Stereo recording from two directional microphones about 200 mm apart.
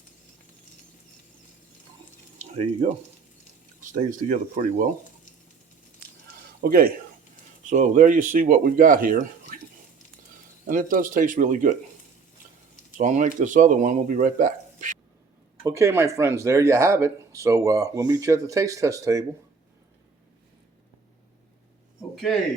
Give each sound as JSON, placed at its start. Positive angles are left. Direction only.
{"t": 2.4, "sound": "a sound", "side_deg": -40}
{"t": 2.8, "sound": "speech", "side_deg": -35}
{"t": 6.6, "sound": "speech", "side_deg": -45}
{"t": 10.7, "sound": "speech", "side_deg": -45}
{"t": 13.0, "sound": "speech", "side_deg": -40}
{"t": 15.6, "sound": "speech", "side_deg": -15}